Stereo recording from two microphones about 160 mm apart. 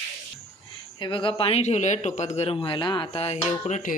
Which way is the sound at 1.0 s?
30° left (ahead or behind).